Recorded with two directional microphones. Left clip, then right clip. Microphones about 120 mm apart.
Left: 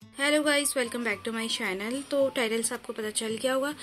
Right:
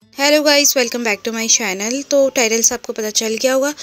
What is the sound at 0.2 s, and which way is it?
A woman's voice, 85° right.